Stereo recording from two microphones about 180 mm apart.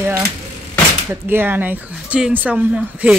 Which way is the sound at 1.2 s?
10° right (ahead or behind).